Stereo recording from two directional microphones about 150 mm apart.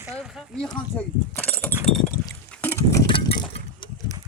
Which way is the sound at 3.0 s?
40° left (ahead or behind).